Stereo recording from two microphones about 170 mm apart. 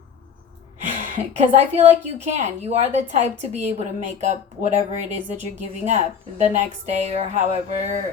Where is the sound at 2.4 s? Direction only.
40° right (ahead or behind).